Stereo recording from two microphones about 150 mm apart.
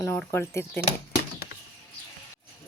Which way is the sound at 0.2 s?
15° left (ahead or behind).